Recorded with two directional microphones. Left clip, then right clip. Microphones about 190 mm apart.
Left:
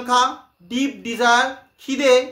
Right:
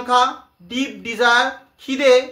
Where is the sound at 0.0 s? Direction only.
10° left (ahead or behind).